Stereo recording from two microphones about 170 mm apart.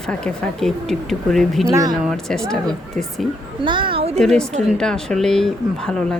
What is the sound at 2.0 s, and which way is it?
Speech, 5° left (ahead or behind).